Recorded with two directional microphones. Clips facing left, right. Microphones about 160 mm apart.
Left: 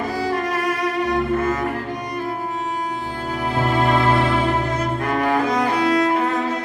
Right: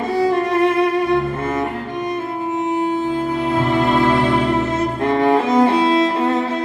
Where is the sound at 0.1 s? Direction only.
25° right (ahead or behind).